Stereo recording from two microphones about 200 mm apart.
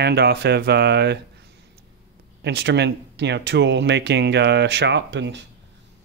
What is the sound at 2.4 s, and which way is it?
Speech, 60° right (ahead or behind).